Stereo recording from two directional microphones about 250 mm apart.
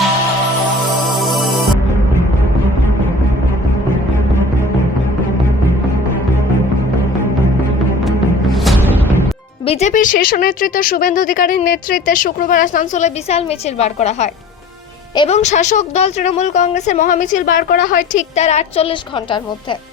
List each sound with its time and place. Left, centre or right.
1.0 s music: centre
8.0 s music: centre
9.6 s a woman's voice: left